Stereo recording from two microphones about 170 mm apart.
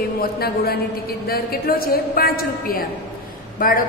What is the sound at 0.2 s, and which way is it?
A woman's voice, 65° left (ahead or behind).